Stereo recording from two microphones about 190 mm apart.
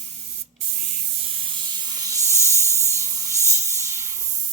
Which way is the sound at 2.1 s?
15° right (ahead or behind).